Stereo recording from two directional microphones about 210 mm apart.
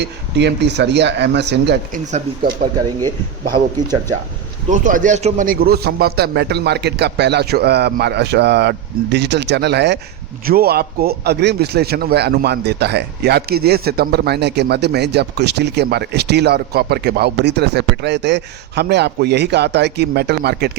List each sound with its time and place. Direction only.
0.0 s speech: 55° right (ahead or behind)
2.0 s speech: 35° right (ahead or behind)
4.7 s speech: 40° right (ahead or behind)